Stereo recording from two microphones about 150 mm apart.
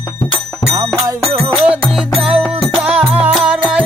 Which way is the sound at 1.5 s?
5° right (ahead or behind).